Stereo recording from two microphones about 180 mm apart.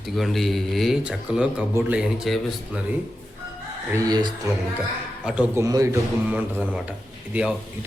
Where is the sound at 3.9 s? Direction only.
20° right (ahead or behind).